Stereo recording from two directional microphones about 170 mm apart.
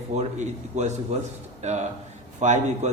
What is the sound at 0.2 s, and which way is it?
A man's voice, 40° right (ahead or behind).